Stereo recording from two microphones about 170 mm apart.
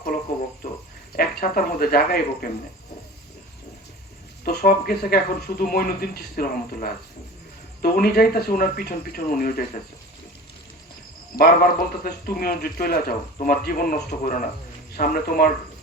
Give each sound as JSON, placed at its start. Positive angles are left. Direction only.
{"t": 0.3, "sound": "a sound", "side_deg": 65}
{"t": 1.1, "sound": "speech", "side_deg": 60}
{"t": 4.4, "sound": "a man's voice", "side_deg": 60}
{"t": 11.3, "sound": "a man's voice", "side_deg": 60}